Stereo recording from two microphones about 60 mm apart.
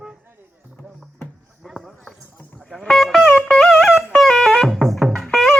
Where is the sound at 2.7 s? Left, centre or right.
Centre.